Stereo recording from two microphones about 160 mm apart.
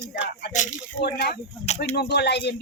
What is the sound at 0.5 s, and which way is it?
Speech, 50° left (ahead or behind).